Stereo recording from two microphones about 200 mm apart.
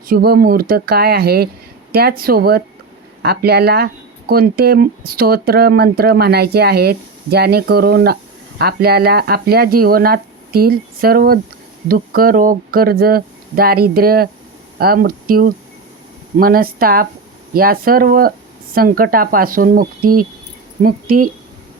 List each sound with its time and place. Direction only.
0.1 s speech: 50° right (ahead or behind)